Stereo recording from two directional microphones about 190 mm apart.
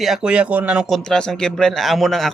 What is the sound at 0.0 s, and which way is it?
Speech, centre (ahead or behind).